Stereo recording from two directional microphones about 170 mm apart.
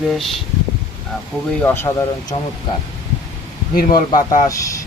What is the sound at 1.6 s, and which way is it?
Speech, 10° left (ahead or behind).